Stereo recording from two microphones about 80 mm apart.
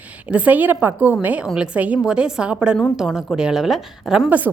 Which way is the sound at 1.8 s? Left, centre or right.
Centre.